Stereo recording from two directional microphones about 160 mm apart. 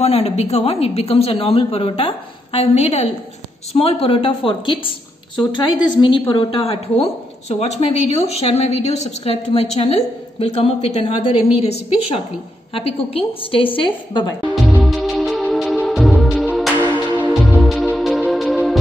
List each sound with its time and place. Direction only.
0.0 s a woman's voice: 40° left (ahead or behind)
14.5 s music: 5° right (ahead or behind)